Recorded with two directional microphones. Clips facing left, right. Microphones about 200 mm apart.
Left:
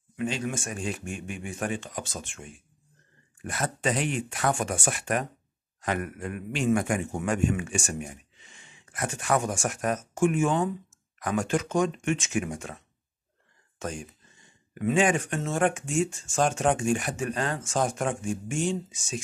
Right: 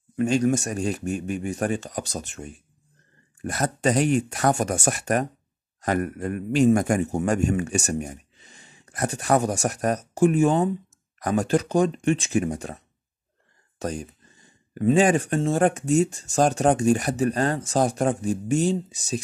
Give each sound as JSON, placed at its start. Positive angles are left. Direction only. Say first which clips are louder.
{"t": 0.1, "sound": "a man's voice", "louder": "right 9 dB", "side_deg": -45}